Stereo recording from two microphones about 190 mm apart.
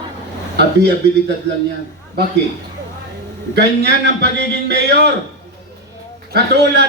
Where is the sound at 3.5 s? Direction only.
60° right (ahead or behind).